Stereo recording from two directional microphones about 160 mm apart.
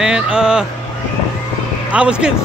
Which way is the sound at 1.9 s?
5° right (ahead or behind).